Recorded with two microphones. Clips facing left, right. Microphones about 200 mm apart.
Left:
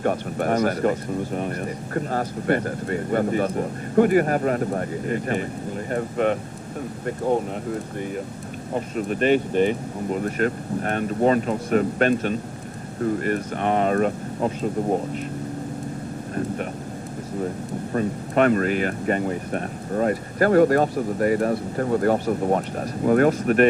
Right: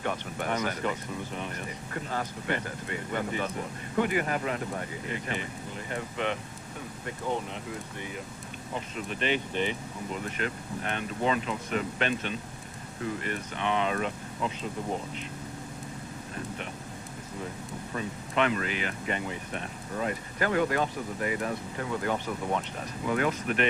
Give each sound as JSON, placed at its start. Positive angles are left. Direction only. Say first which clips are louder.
{"t": 0.0, "sound": "speech", "louder": "left 9 dB", "side_deg": 45}
{"t": 17.9, "sound": "speech", "louder": "left 9 dB", "side_deg": 45}